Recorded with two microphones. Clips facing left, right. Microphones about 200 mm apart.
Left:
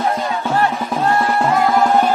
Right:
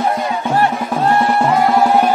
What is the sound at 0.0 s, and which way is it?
Music, 15° right (ahead or behind).